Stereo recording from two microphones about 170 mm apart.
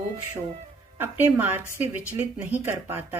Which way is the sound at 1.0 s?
10° right (ahead or behind).